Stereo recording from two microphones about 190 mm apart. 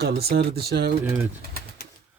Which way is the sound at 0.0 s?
55° right (ahead or behind).